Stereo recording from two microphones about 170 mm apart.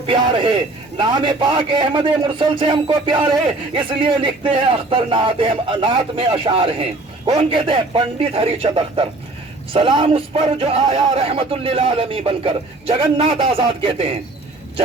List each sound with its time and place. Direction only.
0.0 s a man's voice: 30° right (ahead or behind)